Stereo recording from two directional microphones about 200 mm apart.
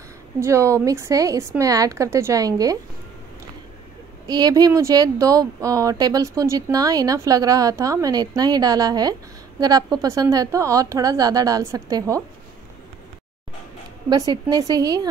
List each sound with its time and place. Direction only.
0.4 s speech: 15° right (ahead or behind)
4.3 s speech: 20° right (ahead or behind)
14.0 s a woman's voice: 20° right (ahead or behind)